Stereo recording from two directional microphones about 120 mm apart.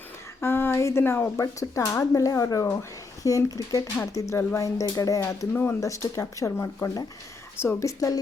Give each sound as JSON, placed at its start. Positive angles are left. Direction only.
{"t": 0.4, "sound": "speech", "side_deg": 20}